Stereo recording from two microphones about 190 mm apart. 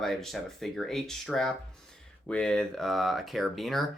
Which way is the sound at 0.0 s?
Centre (ahead or behind).